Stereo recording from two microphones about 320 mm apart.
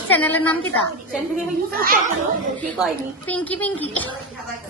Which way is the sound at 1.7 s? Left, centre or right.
Right.